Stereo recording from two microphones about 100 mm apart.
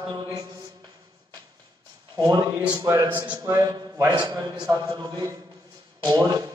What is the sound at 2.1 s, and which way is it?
Speech, 40° right (ahead or behind).